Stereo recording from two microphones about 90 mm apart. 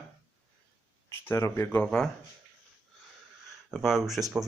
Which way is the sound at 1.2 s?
30° left (ahead or behind).